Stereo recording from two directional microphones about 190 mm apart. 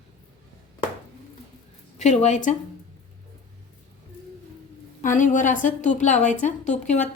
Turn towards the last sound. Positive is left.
turn(degrees=40)  # may be behind; listen again after turning